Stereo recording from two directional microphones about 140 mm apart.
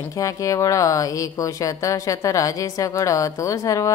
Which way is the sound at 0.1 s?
25° left (ahead or behind).